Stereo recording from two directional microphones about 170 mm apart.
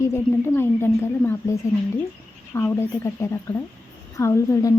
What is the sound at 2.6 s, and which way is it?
A woman's voice, 15° left (ahead or behind).